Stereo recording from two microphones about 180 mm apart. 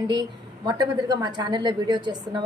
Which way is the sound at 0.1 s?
25° right (ahead or behind).